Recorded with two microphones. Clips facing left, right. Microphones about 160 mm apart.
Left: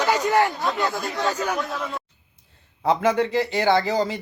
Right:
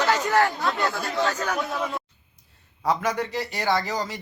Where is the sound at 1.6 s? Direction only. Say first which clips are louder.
Right 1 dB; 10° right (ahead or behind).